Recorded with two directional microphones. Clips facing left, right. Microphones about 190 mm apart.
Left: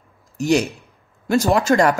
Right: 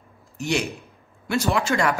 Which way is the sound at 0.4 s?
40° left (ahead or behind).